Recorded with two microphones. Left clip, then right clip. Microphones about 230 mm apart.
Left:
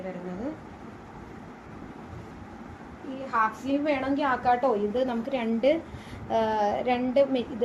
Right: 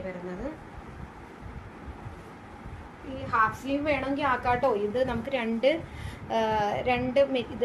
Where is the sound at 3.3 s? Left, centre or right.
Right.